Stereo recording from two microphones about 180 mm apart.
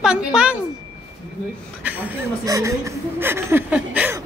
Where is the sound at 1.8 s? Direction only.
10° right (ahead or behind).